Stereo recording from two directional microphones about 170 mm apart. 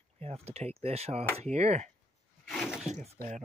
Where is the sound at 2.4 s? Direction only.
Centre (ahead or behind).